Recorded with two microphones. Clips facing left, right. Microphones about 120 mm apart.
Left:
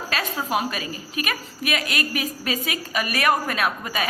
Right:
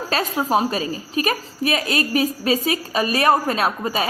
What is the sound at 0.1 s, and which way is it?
A woman's voice, 35° right (ahead or behind).